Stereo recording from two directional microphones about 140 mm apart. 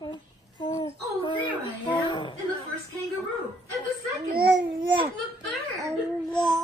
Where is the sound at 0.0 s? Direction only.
30° left (ahead or behind).